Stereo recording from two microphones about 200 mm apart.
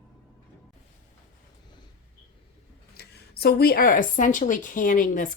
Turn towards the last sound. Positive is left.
turn(degrees=40)  # may be behind; listen again after turning